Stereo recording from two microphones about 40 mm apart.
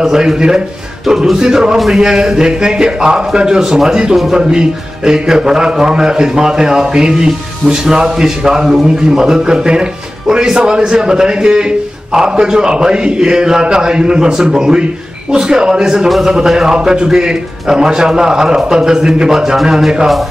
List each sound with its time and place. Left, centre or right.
0.1 s a man's voice: centre